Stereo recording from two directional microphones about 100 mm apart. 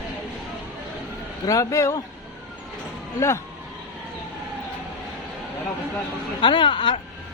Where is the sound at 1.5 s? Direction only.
30° left (ahead or behind).